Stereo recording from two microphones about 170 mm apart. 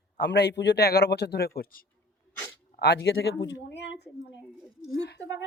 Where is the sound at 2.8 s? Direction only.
80° left.